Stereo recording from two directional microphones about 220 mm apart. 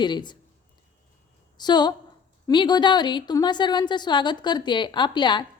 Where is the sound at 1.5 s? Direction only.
20° left (ahead or behind).